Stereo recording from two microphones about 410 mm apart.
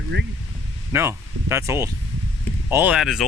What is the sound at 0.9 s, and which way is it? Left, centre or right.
Speech, centre.